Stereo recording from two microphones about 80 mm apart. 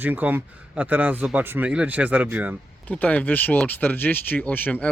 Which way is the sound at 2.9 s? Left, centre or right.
Centre.